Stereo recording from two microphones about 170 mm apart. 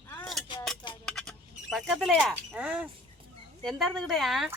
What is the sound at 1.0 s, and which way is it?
Speech, 5° left (ahead or behind).